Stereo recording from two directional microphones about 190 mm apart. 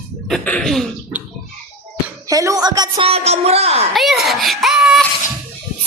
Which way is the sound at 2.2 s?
15° right (ahead or behind).